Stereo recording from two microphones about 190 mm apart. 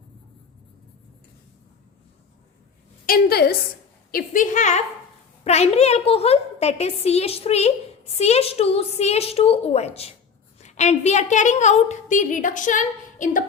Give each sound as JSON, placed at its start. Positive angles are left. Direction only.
{"t": 3.1, "sound": "a woman's voice", "side_deg": 55}
{"t": 4.1, "sound": "a woman's voice", "side_deg": 45}